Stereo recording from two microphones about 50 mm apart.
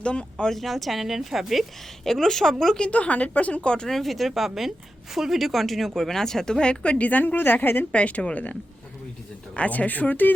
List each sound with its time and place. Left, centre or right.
0.0 s a woman's voice: left
0.5 s speech: centre
2.0 s speech: centre
2.8 s a woman's voice: left
3.8 s speech: centre; by 7.9 s left
7.9 s a woman's voice: left
9.6 s speech: left